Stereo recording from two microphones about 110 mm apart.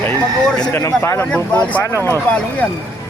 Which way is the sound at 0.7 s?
25° left (ahead or behind).